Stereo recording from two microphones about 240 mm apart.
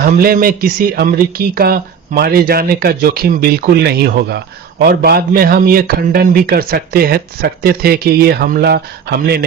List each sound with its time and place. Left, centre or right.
0.0 s speech: right